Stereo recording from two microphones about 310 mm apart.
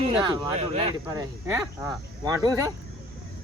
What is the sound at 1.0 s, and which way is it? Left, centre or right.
Speech, centre.